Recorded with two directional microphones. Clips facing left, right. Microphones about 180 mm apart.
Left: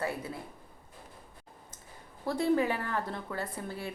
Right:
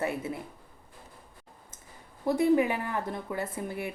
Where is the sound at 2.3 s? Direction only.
15° right (ahead or behind).